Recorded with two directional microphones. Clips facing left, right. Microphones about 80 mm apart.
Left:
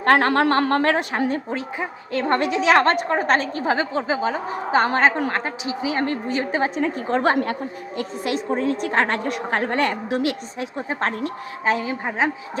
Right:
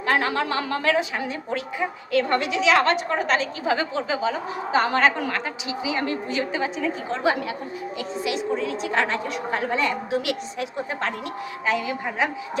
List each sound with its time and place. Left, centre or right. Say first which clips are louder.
0.0 s a woman's voice: left 6 dB; left
1.5 s a woman's voice: even; left
9.9 s a woman's voice: left 2 dB; left